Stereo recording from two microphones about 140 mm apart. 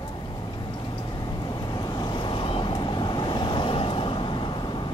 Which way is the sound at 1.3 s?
30° left (ahead or behind).